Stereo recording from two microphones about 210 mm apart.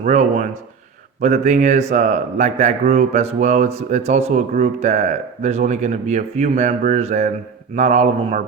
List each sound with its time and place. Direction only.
0.0 s a man's voice: 35° right (ahead or behind)